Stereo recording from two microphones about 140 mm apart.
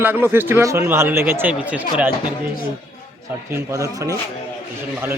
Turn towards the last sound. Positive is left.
turn(degrees=-25)  # may be behind; listen again after turning